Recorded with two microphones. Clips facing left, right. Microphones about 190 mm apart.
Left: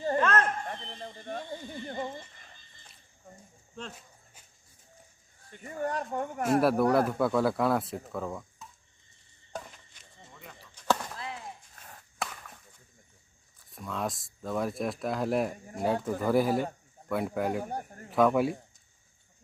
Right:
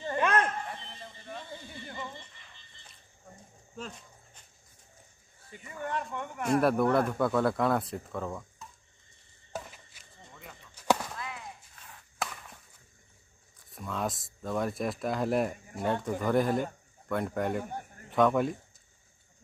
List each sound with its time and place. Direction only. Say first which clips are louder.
0.2 s a sound: right 2 dB; 15° right (ahead or behind)
0.7 s a sound: left 4 dB; 45° left (ahead or behind)
1.9 s neigh: left 6 dB; 45° left (ahead or behind)
3.9 s a sound: even; 5° left (ahead or behind)
5.6 s speech: left 3 dB; 40° left (ahead or behind)
6.4 s speech: left 1 dB; 5° left (ahead or behind)
9.5 s a sound: right 1 dB; 5° right (ahead or behind)
10.7 s chop: right 1 dB; 10° right (ahead or behind)
12.2 s chop: even; centre (ahead or behind)
13.7 s speech: even; centre (ahead or behind)
17.6 s a man's voice: left 3 dB; 40° left (ahead or behind)
18.1 s speech: left 1 dB; 5° left (ahead or behind)